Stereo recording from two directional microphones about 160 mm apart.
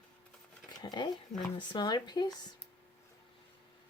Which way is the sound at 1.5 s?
25° left (ahead or behind).